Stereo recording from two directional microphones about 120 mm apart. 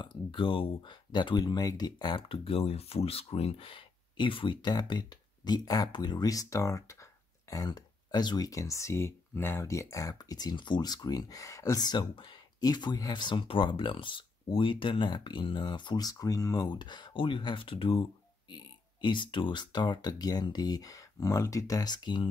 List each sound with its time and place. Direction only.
0.0 s speech: 45° left (ahead or behind)